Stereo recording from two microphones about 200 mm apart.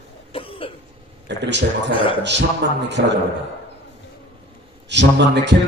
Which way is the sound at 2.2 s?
60° right (ahead or behind).